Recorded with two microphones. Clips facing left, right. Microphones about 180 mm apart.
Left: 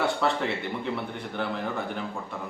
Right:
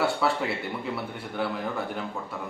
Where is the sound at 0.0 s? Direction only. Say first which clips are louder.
Even; 5° right (ahead or behind).